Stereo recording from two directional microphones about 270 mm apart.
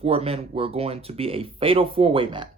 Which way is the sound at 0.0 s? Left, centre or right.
Right.